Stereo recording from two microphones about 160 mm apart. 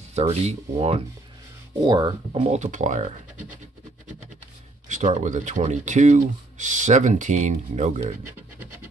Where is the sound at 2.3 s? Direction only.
45° right (ahead or behind).